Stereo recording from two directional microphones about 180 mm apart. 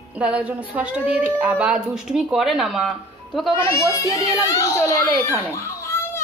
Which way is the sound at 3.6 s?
15° left (ahead or behind).